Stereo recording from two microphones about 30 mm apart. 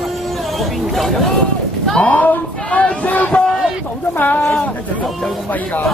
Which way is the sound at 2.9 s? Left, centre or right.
Left.